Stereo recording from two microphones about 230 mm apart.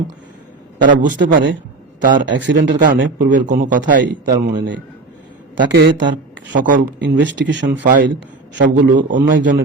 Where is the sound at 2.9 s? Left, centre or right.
Right.